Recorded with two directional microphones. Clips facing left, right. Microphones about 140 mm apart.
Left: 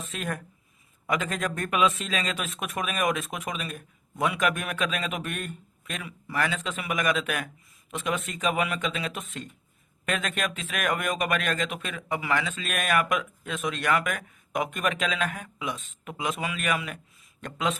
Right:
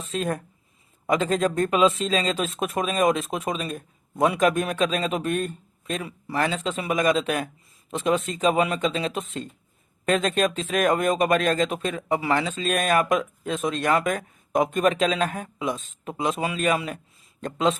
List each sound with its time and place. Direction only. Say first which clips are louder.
0.0 s speech: right 6 dB; 30° right (ahead or behind)